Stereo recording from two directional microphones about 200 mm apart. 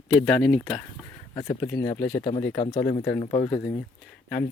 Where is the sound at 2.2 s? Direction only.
25° left (ahead or behind).